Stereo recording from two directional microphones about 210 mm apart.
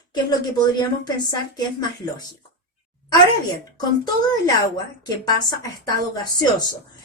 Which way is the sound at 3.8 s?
20° left (ahead or behind).